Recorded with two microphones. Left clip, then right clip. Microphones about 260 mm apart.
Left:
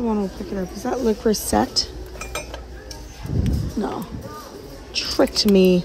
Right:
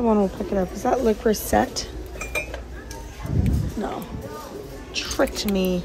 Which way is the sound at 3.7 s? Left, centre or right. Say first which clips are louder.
Left 4 dB; centre.